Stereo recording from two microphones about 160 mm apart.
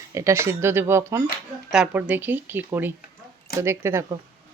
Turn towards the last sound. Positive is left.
turn(degrees=-15)  # may be behind; listen again after turning